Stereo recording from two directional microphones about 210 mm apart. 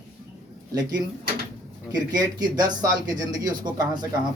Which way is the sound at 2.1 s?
20° right (ahead or behind).